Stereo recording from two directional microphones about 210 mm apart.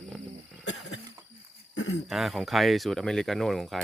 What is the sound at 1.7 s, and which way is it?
Cricket, 75° left (ahead or behind).